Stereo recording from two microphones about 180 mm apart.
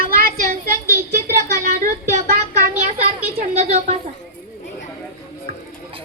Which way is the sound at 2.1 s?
40° right (ahead or behind).